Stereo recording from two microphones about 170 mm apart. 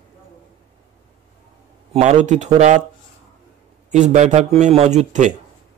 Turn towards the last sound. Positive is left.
turn(degrees=-45)  # may be behind; listen again after turning